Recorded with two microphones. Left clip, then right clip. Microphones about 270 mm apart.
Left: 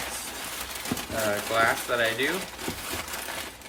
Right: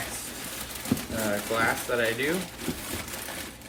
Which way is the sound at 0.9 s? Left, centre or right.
Centre.